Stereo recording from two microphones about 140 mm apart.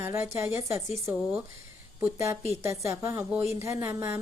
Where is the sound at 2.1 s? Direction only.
20° right (ahead or behind).